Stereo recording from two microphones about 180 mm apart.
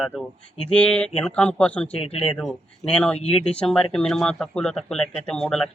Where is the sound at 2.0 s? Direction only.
35° left (ahead or behind).